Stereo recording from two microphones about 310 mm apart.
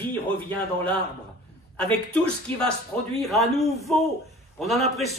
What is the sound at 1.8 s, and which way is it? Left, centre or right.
A man's voice, centre.